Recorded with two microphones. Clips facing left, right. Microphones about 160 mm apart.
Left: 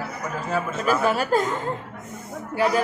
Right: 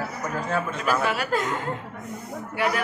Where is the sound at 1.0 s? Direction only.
40° left (ahead or behind).